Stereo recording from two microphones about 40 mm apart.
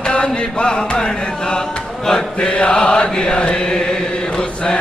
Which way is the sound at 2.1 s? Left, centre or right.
Left.